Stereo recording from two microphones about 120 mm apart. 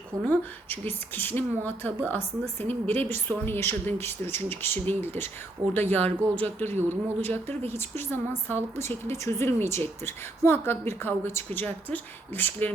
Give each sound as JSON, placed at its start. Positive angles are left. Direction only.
{"t": 0.3, "sound": "a woman's voice", "side_deg": 15}